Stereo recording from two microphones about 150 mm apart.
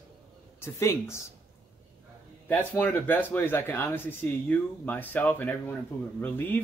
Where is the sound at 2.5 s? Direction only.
10° left (ahead or behind).